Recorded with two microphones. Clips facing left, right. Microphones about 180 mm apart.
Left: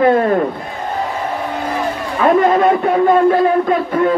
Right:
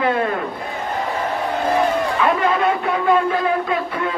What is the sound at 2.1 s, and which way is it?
A man's voice, 45° left (ahead or behind).